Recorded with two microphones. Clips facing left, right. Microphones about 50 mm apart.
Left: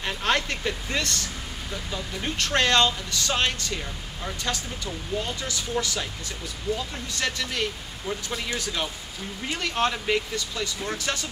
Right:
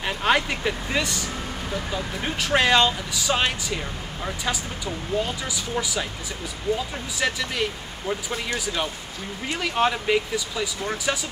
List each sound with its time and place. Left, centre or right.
0.0 s speech: centre
6.7 s speech: right
7.2 s speech: centre